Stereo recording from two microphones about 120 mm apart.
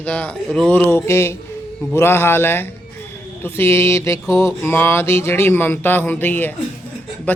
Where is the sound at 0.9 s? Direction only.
20° left (ahead or behind).